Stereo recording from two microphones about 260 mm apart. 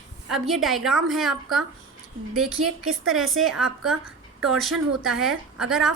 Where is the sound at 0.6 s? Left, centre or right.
Centre.